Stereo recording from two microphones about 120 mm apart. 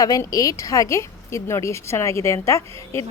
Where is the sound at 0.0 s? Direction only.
30° left (ahead or behind).